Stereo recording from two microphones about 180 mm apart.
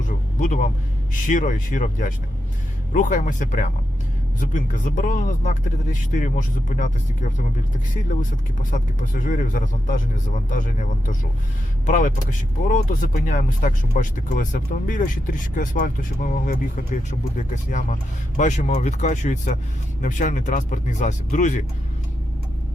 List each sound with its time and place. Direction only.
0.3 s vehicle: 45° left (ahead or behind)
1.3 s speech: 45° left (ahead or behind)
8.7 s speech: 45° left (ahead or behind)